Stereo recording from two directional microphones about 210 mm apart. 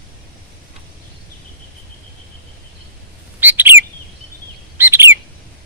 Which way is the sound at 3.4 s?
10° right (ahead or behind).